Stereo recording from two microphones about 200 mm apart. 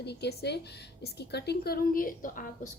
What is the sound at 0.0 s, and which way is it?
A woman's voice, 55° left (ahead or behind).